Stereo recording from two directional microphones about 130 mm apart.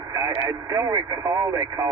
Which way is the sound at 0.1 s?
25° right (ahead or behind).